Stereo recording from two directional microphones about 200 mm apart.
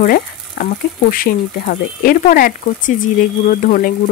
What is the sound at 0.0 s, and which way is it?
Frying, 45° left (ahead or behind).